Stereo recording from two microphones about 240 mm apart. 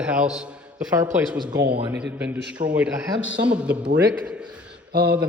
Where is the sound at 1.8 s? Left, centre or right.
Centre.